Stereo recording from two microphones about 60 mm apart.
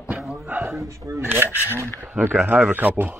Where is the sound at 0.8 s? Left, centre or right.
Right.